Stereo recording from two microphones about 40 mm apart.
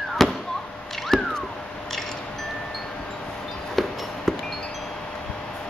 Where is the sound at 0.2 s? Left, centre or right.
Centre.